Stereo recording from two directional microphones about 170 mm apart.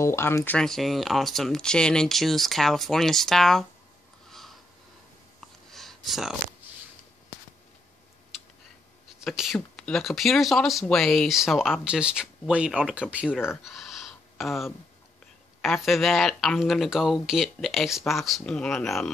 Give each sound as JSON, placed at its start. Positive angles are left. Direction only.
{"t": 0.0, "sound": "speech", "side_deg": 15}
{"t": 0.6, "sound": "speech", "side_deg": 0}
{"t": 4.3, "sound": "a sound", "side_deg": 0}
{"t": 9.2, "sound": "speech", "side_deg": 0}
{"t": 13.3, "sound": "speech", "side_deg": 15}
{"t": 13.7, "sound": "a sound", "side_deg": 0}
{"t": 15.6, "sound": "speech", "side_deg": 0}